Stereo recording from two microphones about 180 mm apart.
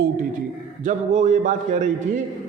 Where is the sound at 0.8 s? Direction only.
40° right (ahead or behind).